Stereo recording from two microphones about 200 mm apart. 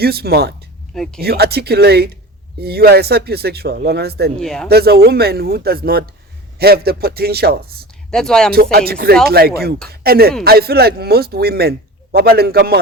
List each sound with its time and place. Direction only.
0.0 s speech: 50° right (ahead or behind)
0.9 s speech: centre (ahead or behind)
1.2 s speech: 50° right (ahead or behind)
4.4 s speech: centre (ahead or behind)
4.7 s speech: 50° right (ahead or behind)
8.1 s speech: 5° left (ahead or behind)
8.5 s speech: 50° right (ahead or behind)